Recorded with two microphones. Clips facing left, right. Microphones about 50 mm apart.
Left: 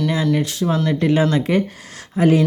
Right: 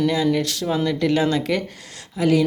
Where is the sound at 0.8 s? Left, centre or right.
Left.